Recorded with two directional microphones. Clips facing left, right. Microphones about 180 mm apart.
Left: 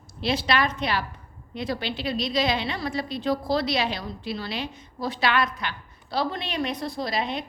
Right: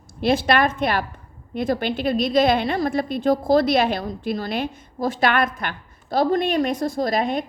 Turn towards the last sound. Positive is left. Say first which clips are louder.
# right 7 dB
turn(degrees=-50)  # may be behind; listen again after turning